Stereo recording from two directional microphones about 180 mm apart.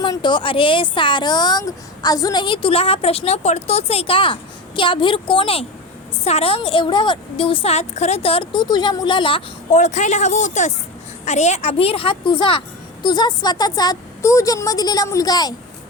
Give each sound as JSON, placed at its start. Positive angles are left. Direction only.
{"t": 0.0, "sound": "speech", "side_deg": 25}
{"t": 9.7, "sound": "speech", "side_deg": 40}